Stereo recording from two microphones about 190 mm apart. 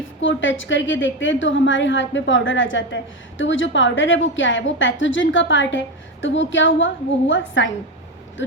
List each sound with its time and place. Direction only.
0.2 s a woman's voice: 80° left